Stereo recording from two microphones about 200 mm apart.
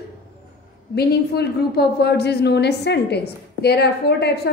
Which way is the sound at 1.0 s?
55° left (ahead or behind).